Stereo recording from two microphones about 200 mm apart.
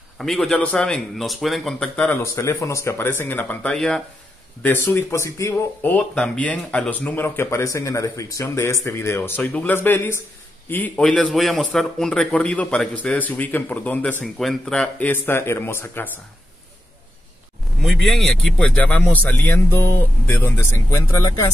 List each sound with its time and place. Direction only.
0.2 s speech: centre (ahead or behind)
17.8 s speech: centre (ahead or behind)